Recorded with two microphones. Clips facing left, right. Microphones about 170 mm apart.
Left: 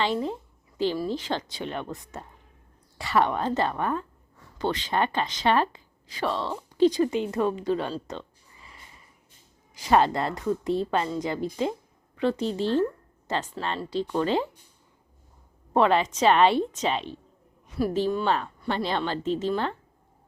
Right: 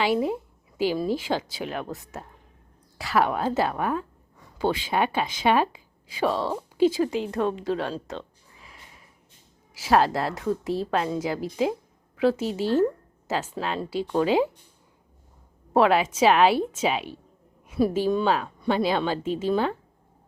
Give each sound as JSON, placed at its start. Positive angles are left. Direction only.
{"t": 0.0, "sound": "a woman's voice", "side_deg": -10}
{"t": 8.0, "sound": "a sound", "side_deg": 0}
{"t": 9.7, "sound": "a woman's voice", "side_deg": -5}
{"t": 15.7, "sound": "a woman's voice", "side_deg": -5}